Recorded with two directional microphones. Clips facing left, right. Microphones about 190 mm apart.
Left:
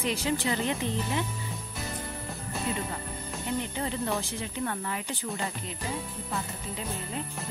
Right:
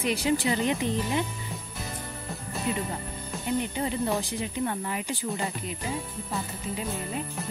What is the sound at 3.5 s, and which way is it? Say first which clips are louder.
Speech: right 4 dB; 15° right (ahead or behind).